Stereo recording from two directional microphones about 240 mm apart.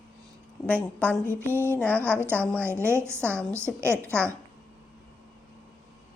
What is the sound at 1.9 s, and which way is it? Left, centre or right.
Speech, centre.